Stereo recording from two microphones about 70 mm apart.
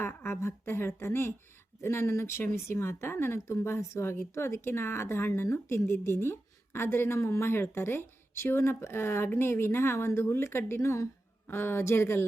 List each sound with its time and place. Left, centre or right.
0.0 s speech: left